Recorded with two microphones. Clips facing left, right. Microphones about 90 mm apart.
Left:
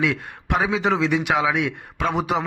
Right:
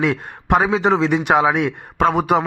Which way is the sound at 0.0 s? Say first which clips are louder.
Right 3 dB; 40° right (ahead or behind).